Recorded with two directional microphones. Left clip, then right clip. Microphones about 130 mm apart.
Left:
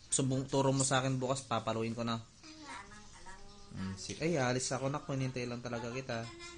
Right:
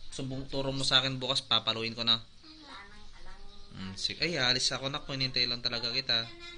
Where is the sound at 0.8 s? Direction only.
20° left (ahead or behind).